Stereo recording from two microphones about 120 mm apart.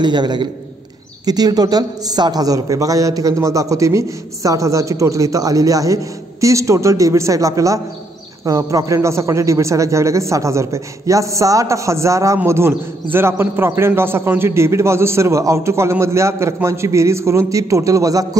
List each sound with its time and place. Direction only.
0.0 s a man's voice: 40° right (ahead or behind)